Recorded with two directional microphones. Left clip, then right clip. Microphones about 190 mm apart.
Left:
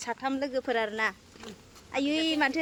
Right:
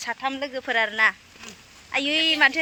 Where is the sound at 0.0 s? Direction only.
10° left (ahead or behind).